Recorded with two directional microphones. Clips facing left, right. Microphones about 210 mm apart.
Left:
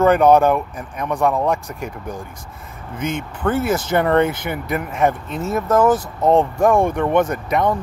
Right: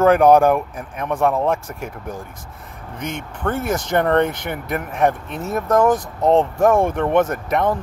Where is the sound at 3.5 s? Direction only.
5° left (ahead or behind).